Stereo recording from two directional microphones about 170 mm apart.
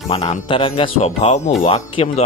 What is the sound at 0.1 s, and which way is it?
Speech, 30° left (ahead or behind).